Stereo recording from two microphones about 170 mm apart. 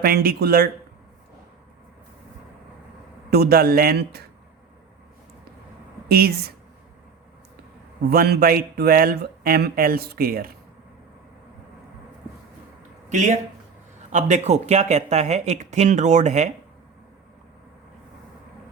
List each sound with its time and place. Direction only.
0.0 s speech: 65° right (ahead or behind)
3.2 s speech: 65° right (ahead or behind)
6.1 s a woman's voice: 65° right (ahead or behind)
8.1 s speech: 65° right (ahead or behind)
13.1 s speech: 45° right (ahead or behind)